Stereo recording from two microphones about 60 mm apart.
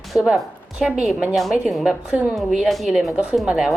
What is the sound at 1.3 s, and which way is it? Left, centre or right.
Speech, centre.